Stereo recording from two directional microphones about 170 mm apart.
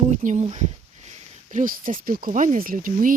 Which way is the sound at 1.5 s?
50° right (ahead or behind).